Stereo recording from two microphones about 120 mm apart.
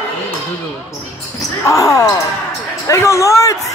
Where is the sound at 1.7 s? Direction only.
25° left (ahead or behind).